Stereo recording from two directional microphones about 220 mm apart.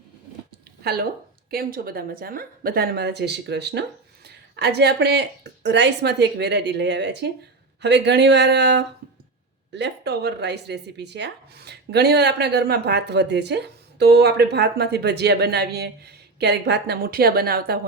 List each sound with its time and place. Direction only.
1.5 s a woman's voice: 45° right (ahead or behind)